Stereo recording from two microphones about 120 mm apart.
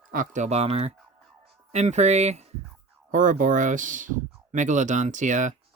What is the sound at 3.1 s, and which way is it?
Speech, 90° right.